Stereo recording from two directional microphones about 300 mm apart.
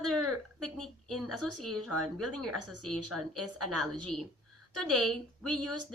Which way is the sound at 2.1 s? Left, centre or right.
Right.